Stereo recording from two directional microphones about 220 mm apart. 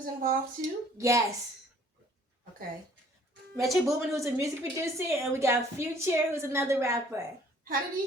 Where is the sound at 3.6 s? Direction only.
Centre (ahead or behind).